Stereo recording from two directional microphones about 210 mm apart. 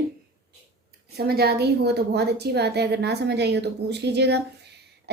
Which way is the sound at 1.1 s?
50° right (ahead or behind).